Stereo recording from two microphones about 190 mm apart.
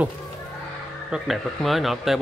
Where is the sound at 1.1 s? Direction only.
Centre (ahead or behind).